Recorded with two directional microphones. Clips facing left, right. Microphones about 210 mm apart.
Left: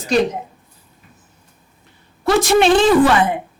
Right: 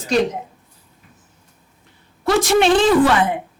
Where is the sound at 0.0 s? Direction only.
10° left (ahead or behind).